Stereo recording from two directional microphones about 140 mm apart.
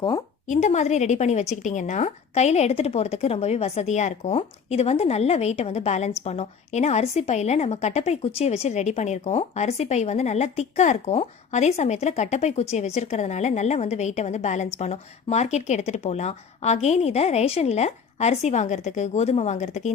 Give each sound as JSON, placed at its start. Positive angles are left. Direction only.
{"t": 0.4, "sound": "a woman's voice", "side_deg": 55}